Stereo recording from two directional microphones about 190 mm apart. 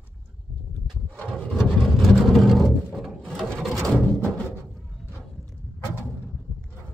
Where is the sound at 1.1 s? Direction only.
5° left (ahead or behind).